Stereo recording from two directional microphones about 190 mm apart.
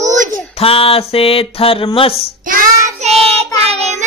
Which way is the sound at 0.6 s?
30° left (ahead or behind).